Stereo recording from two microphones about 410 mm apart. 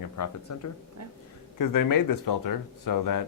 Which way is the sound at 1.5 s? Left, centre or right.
Left.